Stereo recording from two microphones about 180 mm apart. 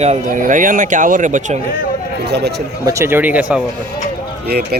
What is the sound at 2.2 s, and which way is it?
Speech, 65° right (ahead or behind).